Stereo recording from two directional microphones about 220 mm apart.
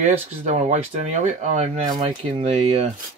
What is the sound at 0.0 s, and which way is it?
Speech, 30° right (ahead or behind).